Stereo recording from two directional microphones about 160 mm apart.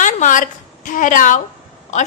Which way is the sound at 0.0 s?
55° left (ahead or behind).